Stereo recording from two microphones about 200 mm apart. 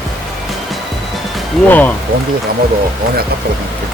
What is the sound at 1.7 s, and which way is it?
Speech, 10° left (ahead or behind).